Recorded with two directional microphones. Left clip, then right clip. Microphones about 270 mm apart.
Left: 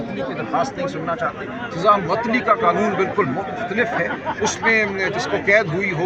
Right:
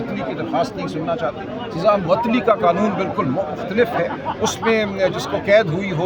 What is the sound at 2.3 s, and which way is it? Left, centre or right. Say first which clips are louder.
Speech: left 2 dB; centre.